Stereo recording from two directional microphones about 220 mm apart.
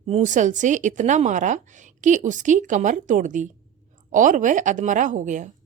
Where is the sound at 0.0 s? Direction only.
30° right (ahead or behind).